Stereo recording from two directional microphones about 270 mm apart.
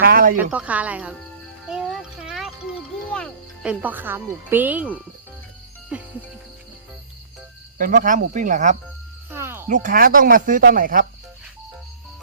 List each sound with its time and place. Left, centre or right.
0.0 s a sound: right
0.5 s speech: centre
5.9 s music: centre
7.8 s speech: right
9.3 s music: centre
9.6 s speech: right